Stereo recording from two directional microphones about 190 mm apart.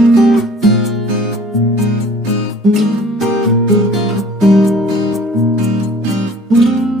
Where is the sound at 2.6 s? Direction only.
Centre (ahead or behind).